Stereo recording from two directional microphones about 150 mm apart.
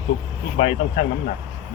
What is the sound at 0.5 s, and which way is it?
Speech, 45° left (ahead or behind).